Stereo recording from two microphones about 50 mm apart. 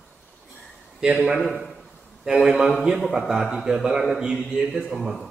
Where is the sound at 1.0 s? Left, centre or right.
Centre.